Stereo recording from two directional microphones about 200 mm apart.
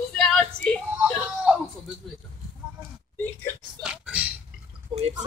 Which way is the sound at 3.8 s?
5° right (ahead or behind).